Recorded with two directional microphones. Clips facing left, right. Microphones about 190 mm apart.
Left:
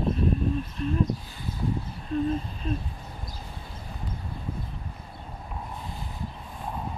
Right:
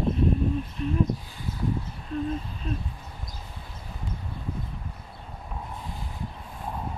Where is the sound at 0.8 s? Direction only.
15° right (ahead or behind).